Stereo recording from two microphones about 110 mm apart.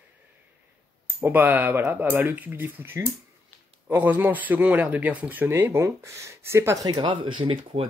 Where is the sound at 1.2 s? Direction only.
20° right (ahead or behind).